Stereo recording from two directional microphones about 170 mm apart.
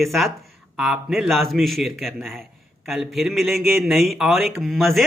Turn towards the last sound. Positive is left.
turn(degrees=0)  # may be behind; listen again after turning